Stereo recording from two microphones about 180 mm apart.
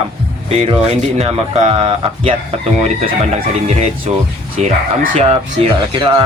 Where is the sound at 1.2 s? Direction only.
35° right (ahead or behind).